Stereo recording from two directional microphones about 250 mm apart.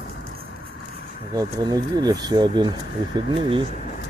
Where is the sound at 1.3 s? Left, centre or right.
Centre.